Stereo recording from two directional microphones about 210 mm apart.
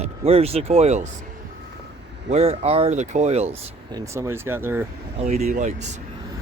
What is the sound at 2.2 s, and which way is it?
Speech, 30° right (ahead or behind).